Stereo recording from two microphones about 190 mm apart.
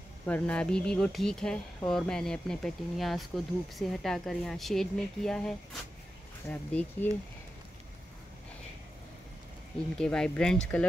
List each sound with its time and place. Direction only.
0.3 s speech: 5° left (ahead or behind)
9.9 s speech: 5° left (ahead or behind)